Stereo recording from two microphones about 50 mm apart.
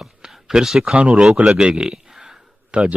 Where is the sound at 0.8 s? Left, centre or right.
Right.